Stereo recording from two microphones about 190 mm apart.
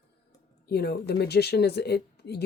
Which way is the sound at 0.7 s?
60° left (ahead or behind).